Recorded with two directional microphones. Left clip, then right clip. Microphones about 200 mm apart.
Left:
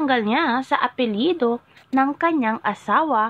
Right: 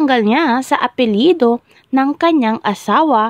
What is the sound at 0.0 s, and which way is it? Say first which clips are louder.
A woman's voice: right 6 dB; 60° right (ahead or behind).